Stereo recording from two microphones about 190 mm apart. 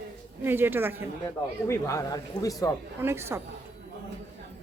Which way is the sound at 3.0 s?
15° right (ahead or behind).